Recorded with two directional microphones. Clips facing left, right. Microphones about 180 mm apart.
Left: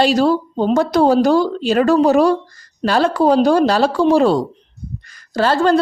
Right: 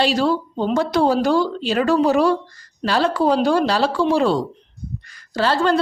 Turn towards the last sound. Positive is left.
turn(degrees=45)  # may be behind; listen again after turning